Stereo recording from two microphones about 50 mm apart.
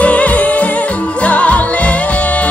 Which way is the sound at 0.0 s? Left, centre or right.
Left.